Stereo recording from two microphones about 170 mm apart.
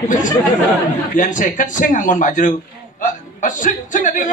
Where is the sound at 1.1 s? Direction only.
50° left (ahead or behind).